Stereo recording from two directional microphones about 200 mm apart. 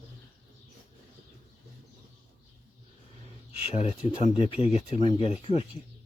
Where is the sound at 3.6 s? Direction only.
30° left (ahead or behind).